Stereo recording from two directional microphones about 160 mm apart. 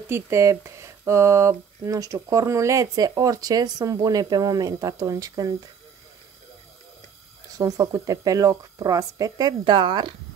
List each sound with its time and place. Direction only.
0.1 s speech: 20° right (ahead or behind)
7.5 s speech: 25° right (ahead or behind)